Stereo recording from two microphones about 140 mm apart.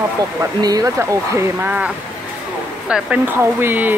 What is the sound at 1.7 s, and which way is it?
Speech, 10° right (ahead or behind).